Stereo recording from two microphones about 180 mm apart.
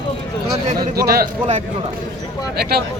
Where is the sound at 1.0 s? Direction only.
60° right (ahead or behind).